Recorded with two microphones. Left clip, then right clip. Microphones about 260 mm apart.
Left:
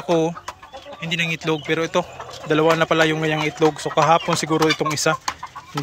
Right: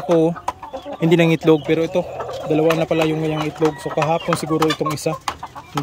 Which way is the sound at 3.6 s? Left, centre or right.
Left.